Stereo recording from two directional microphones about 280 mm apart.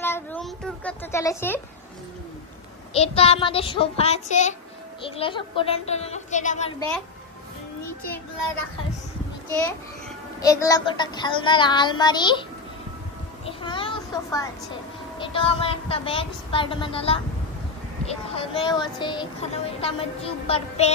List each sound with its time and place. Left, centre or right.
0.0 s a sound: centre
2.9 s speech: left
10.4 s child singing: centre
13.5 s a child's voice: centre